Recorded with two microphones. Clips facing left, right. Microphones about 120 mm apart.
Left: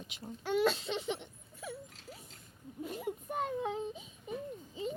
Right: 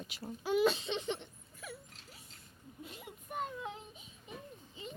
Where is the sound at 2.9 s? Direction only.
35° left (ahead or behind).